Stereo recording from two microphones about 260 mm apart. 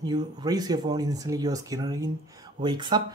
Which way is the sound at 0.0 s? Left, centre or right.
Centre.